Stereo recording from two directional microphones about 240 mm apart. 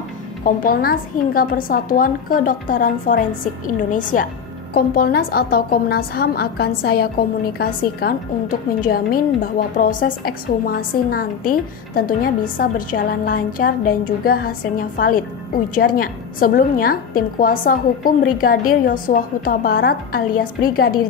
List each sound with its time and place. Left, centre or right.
0.4 s a woman's voice: left